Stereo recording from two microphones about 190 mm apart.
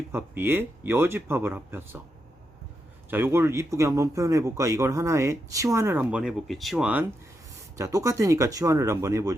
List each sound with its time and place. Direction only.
0.1 s speech: 10° right (ahead or behind)
3.1 s speech: 10° right (ahead or behind)
7.8 s speech: 15° right (ahead or behind)